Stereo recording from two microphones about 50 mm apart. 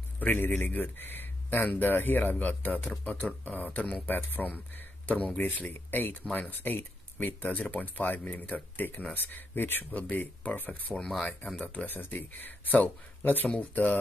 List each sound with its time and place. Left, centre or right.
0.2 s a man's voice: left